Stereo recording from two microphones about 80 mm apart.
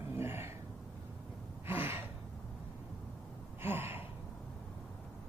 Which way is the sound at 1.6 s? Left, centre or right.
Right.